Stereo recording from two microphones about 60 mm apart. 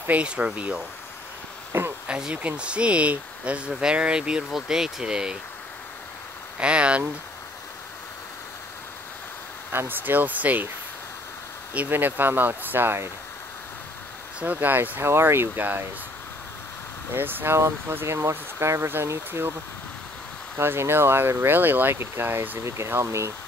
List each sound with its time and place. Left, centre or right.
0.1 s speech: right
1.7 s a sound: right
2.0 s speech: centre
6.6 s speech: centre
9.7 s speech: right
11.9 s speech: right
14.4 s speech: right
15.0 s speech: right
17.1 s speech: right
17.6 s speech: right
20.5 s speech: right
22.6 s speech: right